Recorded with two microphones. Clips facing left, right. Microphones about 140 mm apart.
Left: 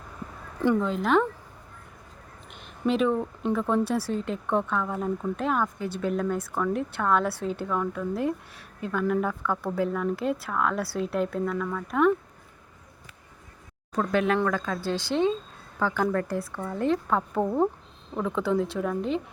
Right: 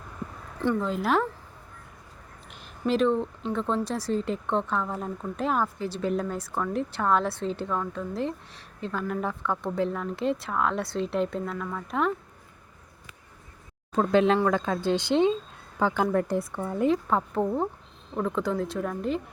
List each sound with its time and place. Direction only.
0.8 s a woman's voice: centre (ahead or behind)
2.5 s a woman's voice: centre (ahead or behind)
13.9 s speech: 25° right (ahead or behind)
16.6 s a woman's voice: 10° right (ahead or behind)